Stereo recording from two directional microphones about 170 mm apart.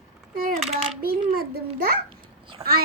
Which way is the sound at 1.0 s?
60° right (ahead or behind).